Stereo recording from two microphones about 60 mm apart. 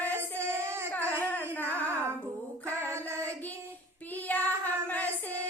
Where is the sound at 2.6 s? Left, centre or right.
Left.